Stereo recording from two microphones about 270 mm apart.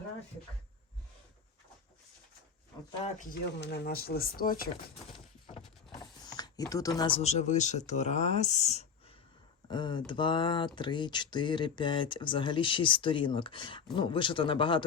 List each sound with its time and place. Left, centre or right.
3.4 s speech: left
5.1 s breaking: centre
6.0 s speech: centre